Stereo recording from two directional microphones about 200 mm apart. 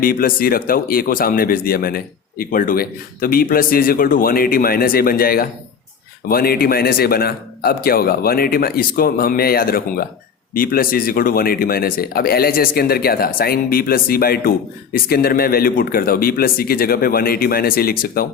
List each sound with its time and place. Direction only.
0.0 s speech: 45° left (ahead or behind)